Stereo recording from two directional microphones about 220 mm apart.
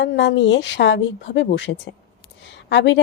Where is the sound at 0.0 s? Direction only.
55° left (ahead or behind).